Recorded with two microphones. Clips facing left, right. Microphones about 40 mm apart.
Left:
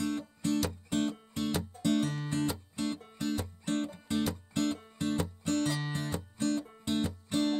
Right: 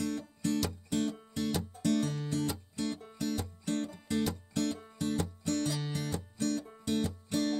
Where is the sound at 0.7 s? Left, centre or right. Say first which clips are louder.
Left 1 dB; left.